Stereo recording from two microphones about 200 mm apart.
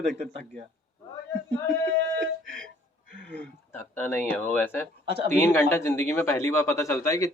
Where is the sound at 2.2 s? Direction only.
70° right (ahead or behind).